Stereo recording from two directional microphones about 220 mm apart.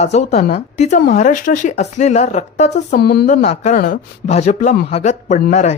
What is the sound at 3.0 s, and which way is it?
Speech, 45° left (ahead or behind).